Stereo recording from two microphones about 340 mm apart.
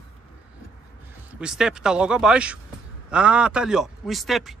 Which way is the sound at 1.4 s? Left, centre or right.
Centre.